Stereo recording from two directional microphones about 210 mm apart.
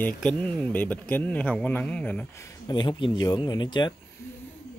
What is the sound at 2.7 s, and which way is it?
Speech, 20° left (ahead or behind).